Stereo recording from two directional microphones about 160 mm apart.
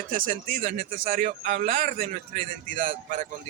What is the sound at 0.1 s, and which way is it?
Speech, 60° right (ahead or behind).